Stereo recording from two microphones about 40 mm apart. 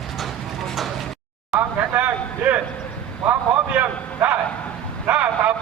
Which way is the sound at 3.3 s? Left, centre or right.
Right.